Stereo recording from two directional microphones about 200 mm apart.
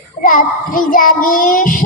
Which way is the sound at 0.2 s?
45° left (ahead or behind).